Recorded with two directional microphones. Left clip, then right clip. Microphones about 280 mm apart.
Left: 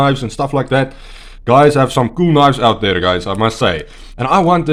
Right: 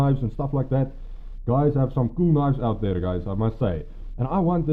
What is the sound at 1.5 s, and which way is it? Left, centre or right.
Speech, centre.